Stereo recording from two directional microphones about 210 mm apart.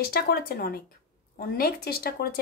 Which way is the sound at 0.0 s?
45° left (ahead or behind).